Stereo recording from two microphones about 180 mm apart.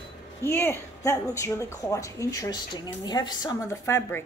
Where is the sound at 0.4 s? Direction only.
15° left (ahead or behind).